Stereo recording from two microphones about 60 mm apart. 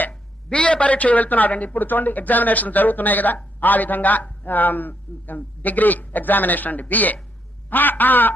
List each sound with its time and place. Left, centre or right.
0.1 s a man's voice: centre